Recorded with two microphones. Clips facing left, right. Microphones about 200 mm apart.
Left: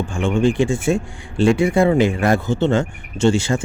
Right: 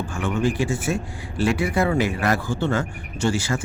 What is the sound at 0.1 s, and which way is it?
Speech, 25° left (ahead or behind).